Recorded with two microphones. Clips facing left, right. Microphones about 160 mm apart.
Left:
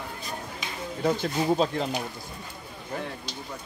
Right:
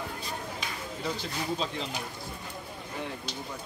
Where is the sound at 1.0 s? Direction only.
50° left (ahead or behind).